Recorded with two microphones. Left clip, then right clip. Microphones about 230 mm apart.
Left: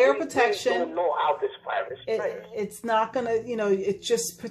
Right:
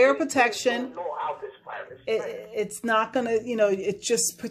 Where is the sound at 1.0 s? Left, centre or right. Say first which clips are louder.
Left 7 dB; left.